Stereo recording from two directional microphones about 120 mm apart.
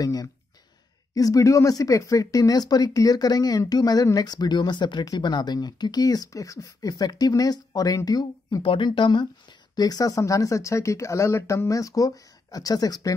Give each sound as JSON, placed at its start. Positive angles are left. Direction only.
{"t": 0.0, "sound": "speech", "side_deg": 30}
{"t": 8.6, "sound": "speech", "side_deg": 45}